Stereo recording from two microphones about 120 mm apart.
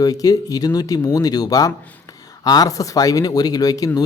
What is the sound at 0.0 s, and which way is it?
Speech, 30° left (ahead or behind).